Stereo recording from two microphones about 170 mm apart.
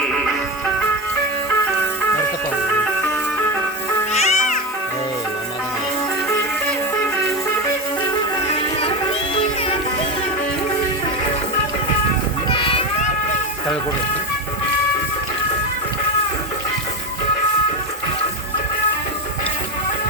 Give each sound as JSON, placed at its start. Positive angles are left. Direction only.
{"t": 4.1, "sound": "cat", "side_deg": 40}
{"t": 9.3, "sound": "music", "side_deg": 35}
{"t": 12.5, "sound": "music", "side_deg": 30}